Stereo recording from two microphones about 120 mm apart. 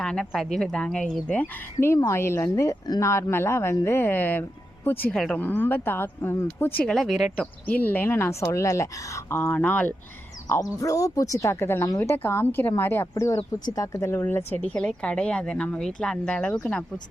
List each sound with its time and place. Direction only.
0.0 s speech: 5° left (ahead or behind)
5.1 s speech: 5° left (ahead or behind)
5.4 s a woman's voice: 15° left (ahead or behind)
6.8 s speech: 5° left (ahead or behind)
7.3 s a woman's voice: 15° left (ahead or behind)
10.5 s a woman's voice: 30° left (ahead or behind); by 16.6 s 10° left (ahead or behind)